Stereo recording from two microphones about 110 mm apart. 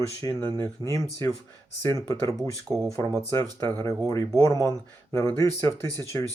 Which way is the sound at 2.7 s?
40° right (ahead or behind).